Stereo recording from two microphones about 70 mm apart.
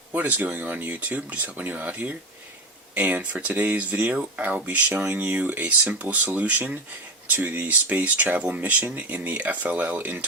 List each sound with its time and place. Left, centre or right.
0.1 s speech: right